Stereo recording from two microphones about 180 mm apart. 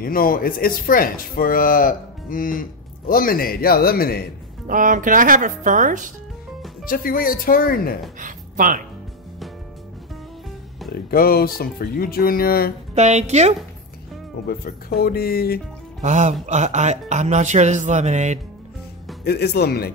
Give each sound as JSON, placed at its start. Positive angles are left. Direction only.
{"t": 0.0, "sound": "speech", "side_deg": 50}
{"t": 4.6, "sound": "speech", "side_deg": -45}
{"t": 6.8, "sound": "speech", "side_deg": 50}
{"t": 8.2, "sound": "speech", "side_deg": -45}
{"t": 10.9, "sound": "speech", "side_deg": 55}
{"t": 12.9, "sound": "music", "side_deg": -40}
{"t": 14.5, "sound": "speech", "side_deg": 55}
{"t": 16.0, "sound": "music", "side_deg": -40}
{"t": 19.2, "sound": "speech", "side_deg": 65}